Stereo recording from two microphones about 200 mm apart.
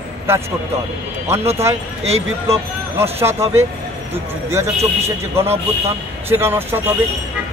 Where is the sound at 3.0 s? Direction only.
10° right (ahead or behind).